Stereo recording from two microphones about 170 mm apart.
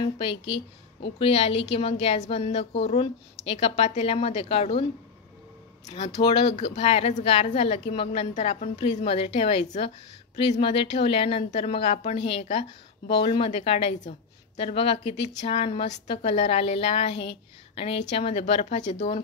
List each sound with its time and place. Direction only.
0.0 s a woman's voice: 30° left (ahead or behind)
5.9 s a woman's voice: 40° left (ahead or behind)